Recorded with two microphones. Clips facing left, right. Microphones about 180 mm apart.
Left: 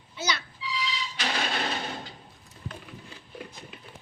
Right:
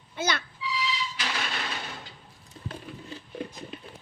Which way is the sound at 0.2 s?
55° right (ahead or behind).